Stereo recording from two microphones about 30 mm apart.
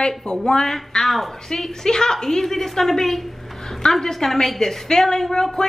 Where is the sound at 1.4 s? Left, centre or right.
Centre.